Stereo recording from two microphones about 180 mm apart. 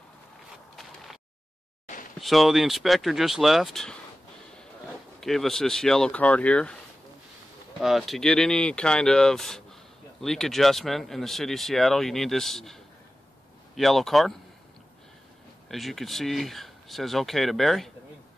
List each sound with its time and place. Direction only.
2.1 s speech: centre (ahead or behind)
5.2 s speech: centre (ahead or behind)
7.8 s speech: centre (ahead or behind)
15.7 s speech: centre (ahead or behind)